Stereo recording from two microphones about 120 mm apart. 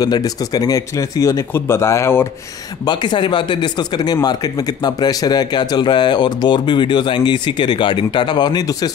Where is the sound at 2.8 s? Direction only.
40° left (ahead or behind).